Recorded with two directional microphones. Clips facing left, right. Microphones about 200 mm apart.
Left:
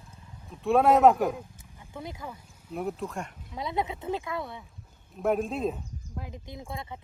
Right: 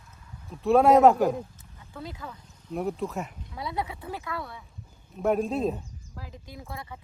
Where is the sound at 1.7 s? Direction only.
20° left (ahead or behind).